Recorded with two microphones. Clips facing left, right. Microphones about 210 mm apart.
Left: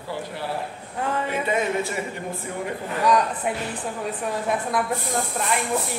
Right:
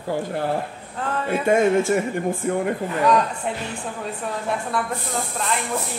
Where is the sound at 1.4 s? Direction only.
50° right (ahead or behind).